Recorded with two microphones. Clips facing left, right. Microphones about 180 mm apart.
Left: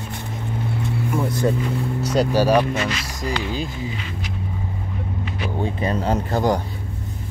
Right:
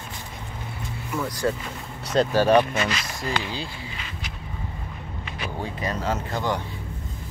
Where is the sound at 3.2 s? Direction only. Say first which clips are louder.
Left 5 dB; 20° left (ahead or behind).